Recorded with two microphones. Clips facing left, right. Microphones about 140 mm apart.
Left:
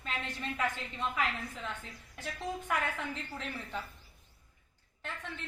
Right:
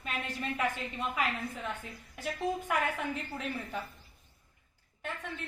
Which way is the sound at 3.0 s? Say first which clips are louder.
Right 3 dB; 15° right (ahead or behind).